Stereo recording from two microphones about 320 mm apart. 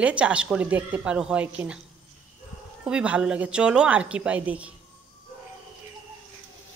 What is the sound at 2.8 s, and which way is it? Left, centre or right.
Speech, centre.